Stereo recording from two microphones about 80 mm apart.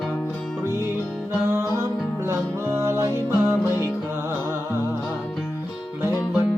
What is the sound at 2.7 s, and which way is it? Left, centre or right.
Music, right.